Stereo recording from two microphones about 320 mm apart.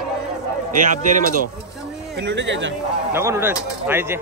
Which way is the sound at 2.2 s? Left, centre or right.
Right.